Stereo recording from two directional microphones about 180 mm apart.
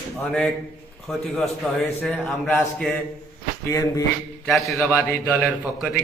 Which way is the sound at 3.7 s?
20° left (ahead or behind).